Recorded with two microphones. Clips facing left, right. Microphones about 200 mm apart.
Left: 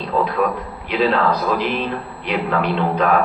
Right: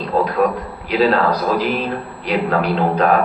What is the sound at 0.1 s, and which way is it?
Speech, 40° right (ahead or behind).